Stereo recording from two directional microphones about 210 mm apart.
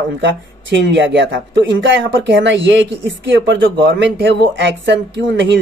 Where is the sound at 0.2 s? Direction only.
60° right (ahead or behind).